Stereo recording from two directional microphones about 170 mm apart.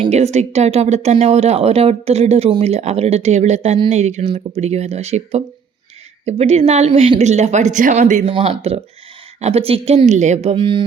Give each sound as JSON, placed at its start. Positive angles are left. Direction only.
{"t": 0.0, "sound": "speech", "side_deg": -40}